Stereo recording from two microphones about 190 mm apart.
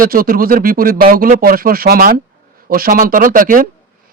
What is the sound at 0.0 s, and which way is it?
Speech, 50° right (ahead or behind).